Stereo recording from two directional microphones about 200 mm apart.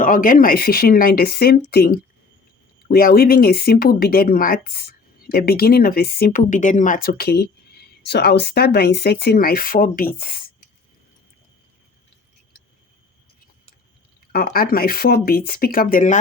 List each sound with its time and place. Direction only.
0.0 s speech: 45° left (ahead or behind)
14.3 s speech: 50° left (ahead or behind)